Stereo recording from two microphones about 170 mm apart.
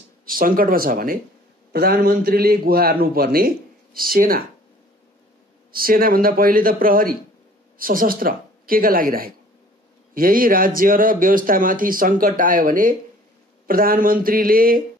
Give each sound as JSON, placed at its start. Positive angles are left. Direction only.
{"t": 0.2, "sound": "speech", "side_deg": -55}
{"t": 5.7, "sound": "speech", "side_deg": -60}